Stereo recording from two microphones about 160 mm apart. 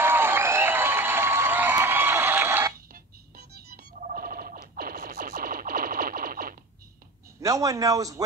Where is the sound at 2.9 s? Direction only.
75° right (ahead or behind).